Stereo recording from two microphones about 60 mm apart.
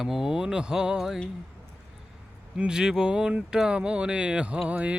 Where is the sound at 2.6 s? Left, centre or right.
Centre.